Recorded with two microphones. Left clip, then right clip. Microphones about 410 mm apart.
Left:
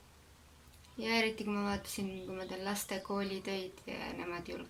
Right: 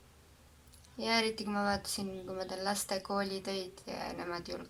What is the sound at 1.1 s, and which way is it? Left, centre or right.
Speech, centre.